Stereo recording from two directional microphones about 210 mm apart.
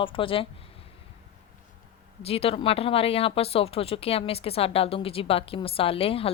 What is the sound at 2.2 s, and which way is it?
Speech, 30° left (ahead or behind).